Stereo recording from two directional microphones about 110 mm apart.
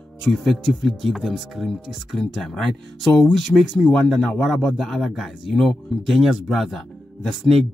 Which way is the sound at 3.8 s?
5° left (ahead or behind).